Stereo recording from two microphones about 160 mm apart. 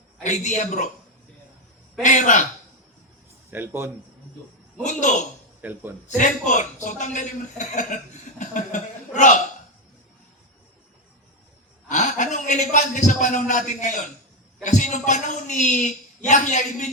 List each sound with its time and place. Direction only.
0.2 s a woman's voice: 50° left (ahead or behind)
2.0 s a woman's voice: 50° left (ahead or behind)
3.5 s speech: 15° right (ahead or behind)
4.8 s a woman's voice: 45° left (ahead or behind)
5.6 s speech: 10° right (ahead or behind)
6.1 s a woman's voice: 50° left (ahead or behind)
8.4 s chuckle: 50° left (ahead or behind)
11.9 s a man's voice: 50° left (ahead or behind)